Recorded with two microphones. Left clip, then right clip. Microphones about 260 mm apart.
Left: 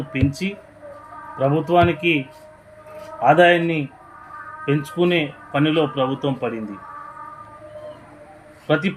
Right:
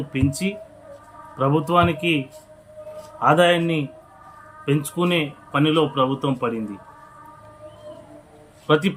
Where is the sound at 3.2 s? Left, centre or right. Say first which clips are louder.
Left 3 dB; centre.